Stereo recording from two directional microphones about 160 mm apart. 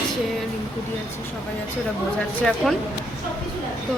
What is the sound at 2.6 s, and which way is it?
Speech, centre (ahead or behind).